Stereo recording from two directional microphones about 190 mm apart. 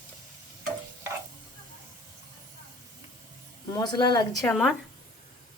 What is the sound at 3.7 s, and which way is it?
Speech, 20° left (ahead or behind).